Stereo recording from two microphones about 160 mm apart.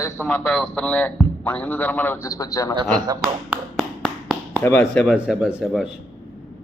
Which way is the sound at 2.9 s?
25° right (ahead or behind).